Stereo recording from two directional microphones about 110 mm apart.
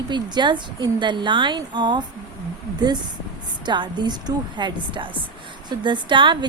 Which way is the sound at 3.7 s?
45° right (ahead or behind).